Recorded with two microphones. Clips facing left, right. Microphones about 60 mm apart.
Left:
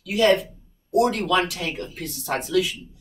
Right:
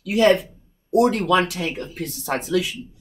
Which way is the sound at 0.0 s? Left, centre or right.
Right.